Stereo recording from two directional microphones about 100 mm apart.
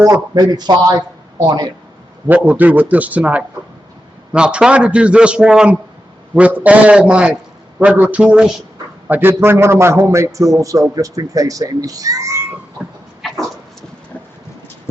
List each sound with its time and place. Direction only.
0.0 s speech: 40° right (ahead or behind)
2.2 s a man's voice: 15° right (ahead or behind)
9.0 s a man's voice: 20° right (ahead or behind)